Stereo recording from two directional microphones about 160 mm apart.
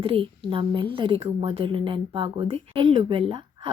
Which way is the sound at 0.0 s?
35° right (ahead or behind).